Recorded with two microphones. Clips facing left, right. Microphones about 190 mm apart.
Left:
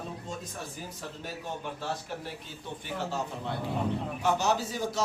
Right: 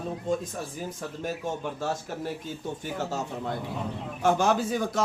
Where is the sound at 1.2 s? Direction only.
45° right (ahead or behind).